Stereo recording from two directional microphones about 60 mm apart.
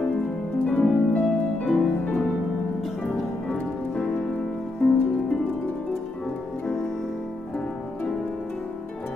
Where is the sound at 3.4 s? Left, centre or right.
Centre.